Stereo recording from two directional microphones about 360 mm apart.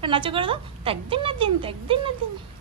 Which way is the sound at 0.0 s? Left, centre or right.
Centre.